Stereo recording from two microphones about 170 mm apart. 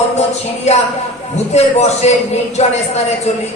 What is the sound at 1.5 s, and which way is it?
A man's voice, 40° left (ahead or behind).